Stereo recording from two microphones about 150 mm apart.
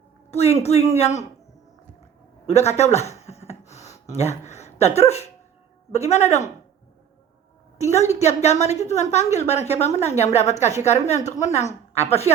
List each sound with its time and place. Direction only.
0.3 s a woman's voice: 45° left (ahead or behind)
2.5 s speech: 45° left (ahead or behind)
3.7 s a sound: 45° left (ahead or behind)
5.9 s a woman's voice: 45° left (ahead or behind)
7.8 s a woman's voice: 50° left (ahead or behind)